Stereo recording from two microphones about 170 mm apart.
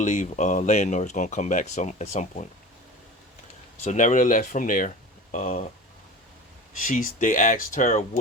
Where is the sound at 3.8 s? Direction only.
50° left (ahead or behind).